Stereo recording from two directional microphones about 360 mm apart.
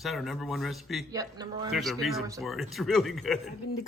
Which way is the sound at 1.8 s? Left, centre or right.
Centre.